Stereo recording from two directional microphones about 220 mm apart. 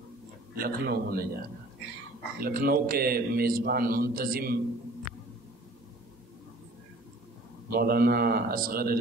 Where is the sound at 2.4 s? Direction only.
40° right (ahead or behind).